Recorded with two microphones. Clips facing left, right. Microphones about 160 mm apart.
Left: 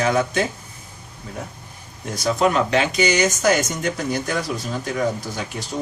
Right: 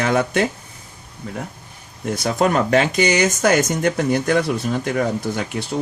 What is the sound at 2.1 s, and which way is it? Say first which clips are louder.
Speech: right 1 dB; 55° right (ahead or behind).